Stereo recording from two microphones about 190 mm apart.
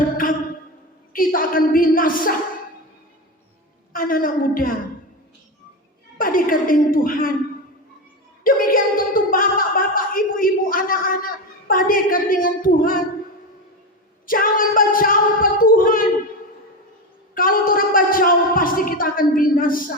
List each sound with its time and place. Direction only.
1.1 s a woman's voice: 45° left (ahead or behind)
3.9 s a woman's voice: 45° left (ahead or behind)
6.1 s a woman's voice: 45° left (ahead or behind)
8.4 s a woman's voice: 50° left (ahead or behind)
14.3 s speech: 50° left (ahead or behind)
17.3 s a sound: 50° left (ahead or behind)